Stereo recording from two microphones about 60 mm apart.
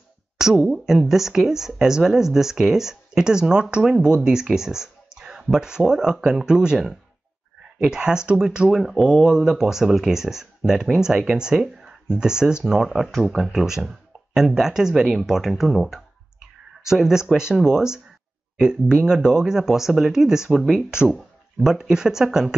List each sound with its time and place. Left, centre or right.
0.4 s speech: centre
7.8 s speech: centre